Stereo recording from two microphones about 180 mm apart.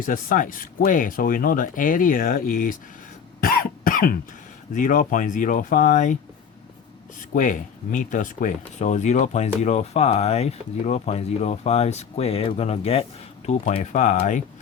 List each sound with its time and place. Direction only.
0.0 s speech: 50° left (ahead or behind)
3.4 s cough: 55° left (ahead or behind)
4.7 s speech: 45° left (ahead or behind)
7.2 s speech: 45° left (ahead or behind)